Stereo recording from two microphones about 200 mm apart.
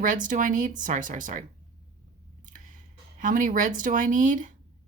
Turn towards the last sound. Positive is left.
turn(degrees=-40)  # may be behind; listen again after turning